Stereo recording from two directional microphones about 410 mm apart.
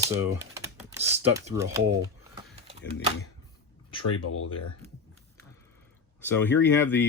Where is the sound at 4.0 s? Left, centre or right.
Left.